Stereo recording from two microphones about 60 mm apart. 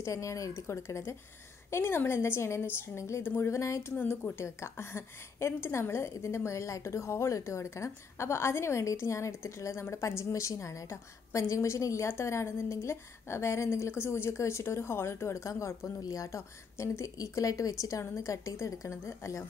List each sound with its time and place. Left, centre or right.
0.0 s a woman's voice: left
4.4 s a woman's voice: left
16.3 s a woman's voice: left